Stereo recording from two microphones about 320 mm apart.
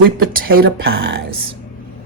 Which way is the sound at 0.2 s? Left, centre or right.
Right.